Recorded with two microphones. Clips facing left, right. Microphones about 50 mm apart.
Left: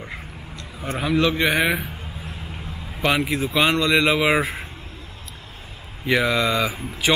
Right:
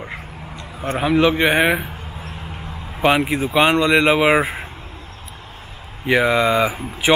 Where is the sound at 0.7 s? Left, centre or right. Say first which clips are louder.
Right 4 dB; right.